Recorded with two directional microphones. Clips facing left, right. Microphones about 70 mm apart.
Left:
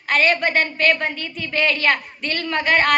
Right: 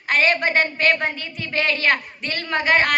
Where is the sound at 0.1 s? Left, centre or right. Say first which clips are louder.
Left 1 dB; right.